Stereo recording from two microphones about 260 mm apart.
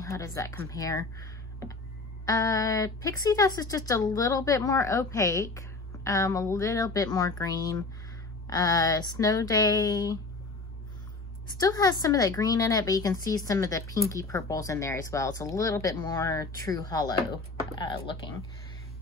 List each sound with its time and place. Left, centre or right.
0.0 s speech: centre
11.6 s speech: centre